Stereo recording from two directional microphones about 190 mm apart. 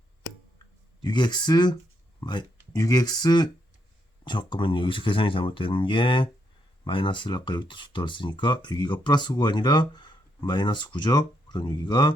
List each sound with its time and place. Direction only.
1.0 s speech: 25° left (ahead or behind)